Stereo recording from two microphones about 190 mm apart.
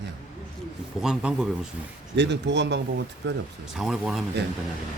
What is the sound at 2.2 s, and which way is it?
Speech, 65° right (ahead or behind).